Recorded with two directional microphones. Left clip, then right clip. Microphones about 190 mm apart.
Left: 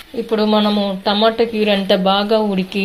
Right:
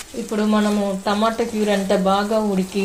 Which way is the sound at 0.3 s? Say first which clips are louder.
Left 5 dB; 35° left (ahead or behind).